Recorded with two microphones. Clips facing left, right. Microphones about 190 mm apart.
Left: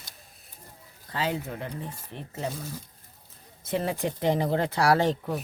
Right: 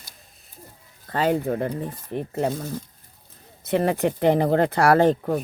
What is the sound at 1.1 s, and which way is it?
Speech, 50° right (ahead or behind).